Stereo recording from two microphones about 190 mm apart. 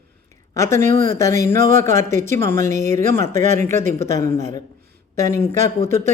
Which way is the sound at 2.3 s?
15° left (ahead or behind).